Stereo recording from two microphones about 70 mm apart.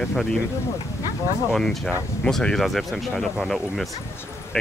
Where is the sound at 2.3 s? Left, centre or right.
Centre.